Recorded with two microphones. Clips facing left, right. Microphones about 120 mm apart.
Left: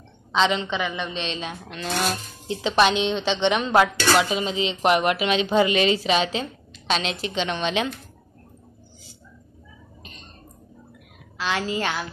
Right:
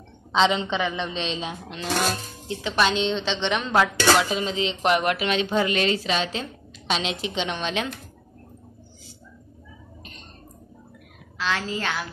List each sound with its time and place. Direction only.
0.3 s a woman's voice: 25° right (ahead or behind)
2.4 s a woman's voice: 20° left (ahead or behind)
6.9 s a woman's voice: 5° right (ahead or behind)
7.6 s speech: 5° left (ahead or behind)
11.3 s a woman's voice: 15° left (ahead or behind)